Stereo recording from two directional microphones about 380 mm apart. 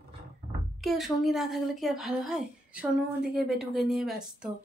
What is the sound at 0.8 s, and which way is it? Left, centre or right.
A woman's voice, centre.